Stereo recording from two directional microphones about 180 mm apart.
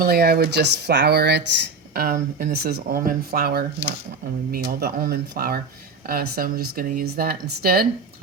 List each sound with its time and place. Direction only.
0.0 s speech: 60° right (ahead or behind)